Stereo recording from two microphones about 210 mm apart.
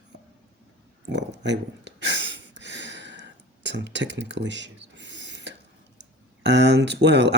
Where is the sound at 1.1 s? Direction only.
55° right (ahead or behind).